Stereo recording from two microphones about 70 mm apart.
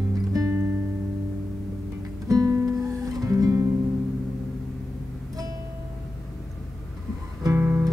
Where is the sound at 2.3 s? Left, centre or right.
Right.